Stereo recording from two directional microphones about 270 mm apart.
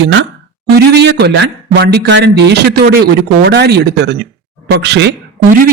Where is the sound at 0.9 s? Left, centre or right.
Right.